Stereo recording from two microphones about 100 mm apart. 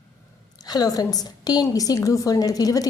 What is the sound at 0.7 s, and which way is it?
A woman's voice, 40° left (ahead or behind).